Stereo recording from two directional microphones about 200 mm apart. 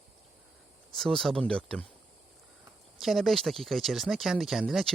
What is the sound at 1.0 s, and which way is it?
Speech, centre (ahead or behind).